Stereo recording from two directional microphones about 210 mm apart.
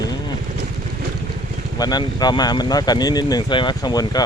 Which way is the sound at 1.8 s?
20° left (ahead or behind).